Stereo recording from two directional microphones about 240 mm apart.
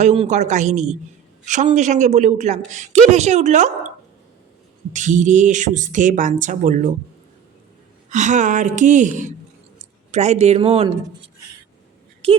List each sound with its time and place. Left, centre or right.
0.0 s a woman's voice: right
4.9 s speech: right
8.1 s a woman's voice: right